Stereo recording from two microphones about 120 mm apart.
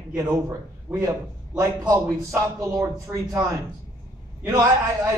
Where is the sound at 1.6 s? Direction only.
25° right (ahead or behind).